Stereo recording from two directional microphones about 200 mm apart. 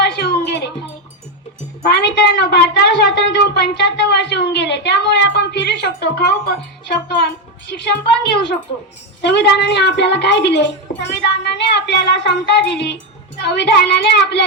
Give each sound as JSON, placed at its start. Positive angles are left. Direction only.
{"t": 0.0, "sound": "music", "side_deg": 55}
{"t": 1.8, "sound": "a sound", "side_deg": 55}
{"t": 7.7, "sound": "speech", "side_deg": 60}